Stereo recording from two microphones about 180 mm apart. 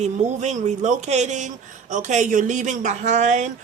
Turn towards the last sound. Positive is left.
turn(degrees=-40)  # may be behind; listen again after turning